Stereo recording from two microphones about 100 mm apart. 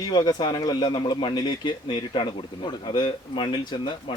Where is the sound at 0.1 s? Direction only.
45° left (ahead or behind).